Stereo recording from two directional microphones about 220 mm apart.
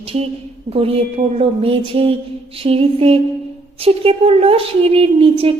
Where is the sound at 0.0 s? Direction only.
25° right (ahead or behind).